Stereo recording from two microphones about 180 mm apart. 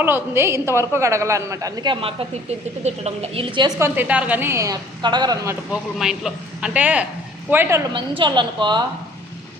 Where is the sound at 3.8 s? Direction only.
10° right (ahead or behind).